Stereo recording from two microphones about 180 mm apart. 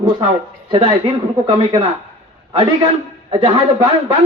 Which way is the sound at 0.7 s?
30° right (ahead or behind).